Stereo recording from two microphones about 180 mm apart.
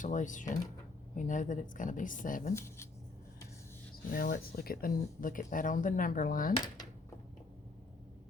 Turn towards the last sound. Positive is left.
turn(degrees=50)  # may be behind; listen again after turning